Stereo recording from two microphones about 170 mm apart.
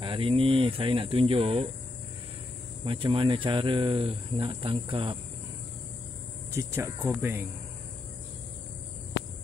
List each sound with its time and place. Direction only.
0.0 s speech: 30° right (ahead or behind)
2.8 s speech: 30° right (ahead or behind)
6.5 s speech: 15° right (ahead or behind)